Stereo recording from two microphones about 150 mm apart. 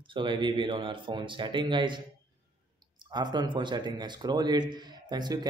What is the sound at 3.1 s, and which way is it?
A man's voice, 30° right (ahead or behind).